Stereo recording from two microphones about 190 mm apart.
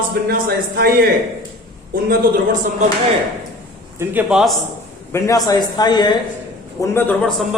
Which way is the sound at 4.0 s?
5° right (ahead or behind).